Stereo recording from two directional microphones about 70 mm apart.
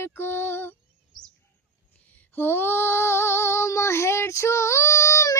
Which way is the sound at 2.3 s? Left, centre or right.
Left.